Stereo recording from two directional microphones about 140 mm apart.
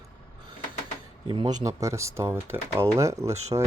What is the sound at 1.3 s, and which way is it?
Speech, 35° right (ahead or behind).